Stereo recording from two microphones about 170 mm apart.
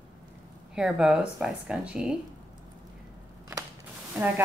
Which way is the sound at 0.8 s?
5° right (ahead or behind).